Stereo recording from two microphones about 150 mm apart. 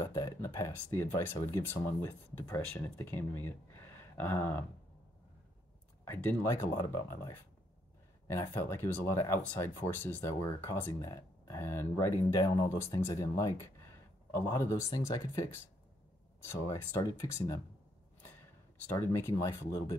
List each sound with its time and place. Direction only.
0.0 s speech: 20° left (ahead or behind)
6.2 s speech: 20° left (ahead or behind)
18.9 s speech: 20° left (ahead or behind)